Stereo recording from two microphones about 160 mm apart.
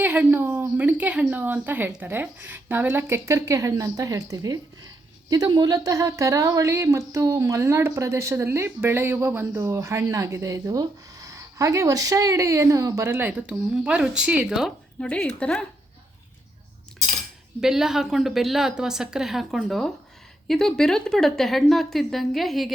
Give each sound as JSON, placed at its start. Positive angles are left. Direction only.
{"t": 0.0, "sound": "a woman's voice", "side_deg": -10}
{"t": 15.0, "sound": "speech", "side_deg": 5}
{"t": 17.6, "sound": "speech", "side_deg": -5}